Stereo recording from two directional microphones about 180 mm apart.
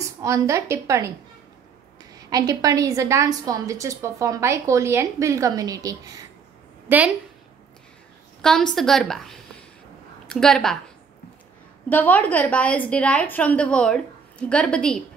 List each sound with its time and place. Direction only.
0.2 s a woman's voice: 15° right (ahead or behind)
2.1 s a woman's voice: 20° right (ahead or behind)
8.4 s a woman's voice: 5° left (ahead or behind)
11.9 s a woman's voice: 10° left (ahead or behind)